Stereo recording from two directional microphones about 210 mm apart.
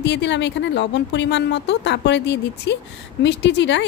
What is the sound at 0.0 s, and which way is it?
Speech, 55° left (ahead or behind).